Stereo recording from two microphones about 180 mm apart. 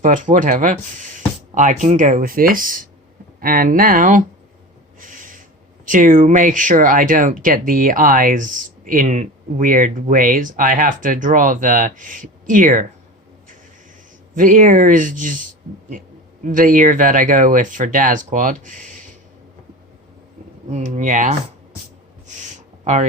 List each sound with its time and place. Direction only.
0.0 s speech: 45° right (ahead or behind)
4.9 s snort: 50° right (ahead or behind)
5.8 s speech: 45° right (ahead or behind)
14.3 s speech: 45° right (ahead or behind)
16.5 s speech: 50° right (ahead or behind)
20.7 s speech: 40° right (ahead or behind)
22.3 s a sound: 40° right (ahead or behind)